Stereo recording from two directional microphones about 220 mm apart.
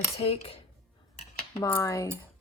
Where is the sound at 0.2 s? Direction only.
25° left (ahead or behind).